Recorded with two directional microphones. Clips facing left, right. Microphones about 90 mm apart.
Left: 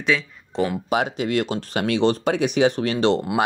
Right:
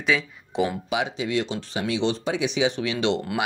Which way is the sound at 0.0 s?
5° right (ahead or behind).